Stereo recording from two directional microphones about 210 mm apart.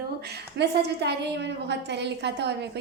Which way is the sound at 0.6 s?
55° right (ahead or behind).